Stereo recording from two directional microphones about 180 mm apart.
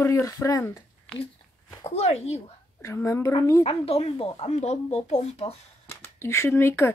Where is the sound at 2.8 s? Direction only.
15° left (ahead or behind).